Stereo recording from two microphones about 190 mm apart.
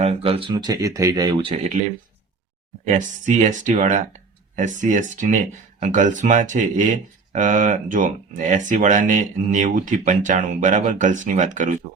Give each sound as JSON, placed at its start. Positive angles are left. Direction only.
{"t": 0.0, "sound": "speech", "side_deg": -30}
{"t": 2.8, "sound": "speech", "side_deg": -40}